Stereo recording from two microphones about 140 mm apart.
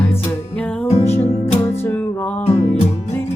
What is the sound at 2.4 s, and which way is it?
Music, 45° left (ahead or behind).